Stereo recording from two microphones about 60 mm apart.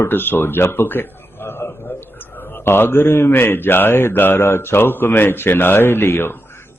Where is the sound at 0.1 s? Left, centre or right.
Left.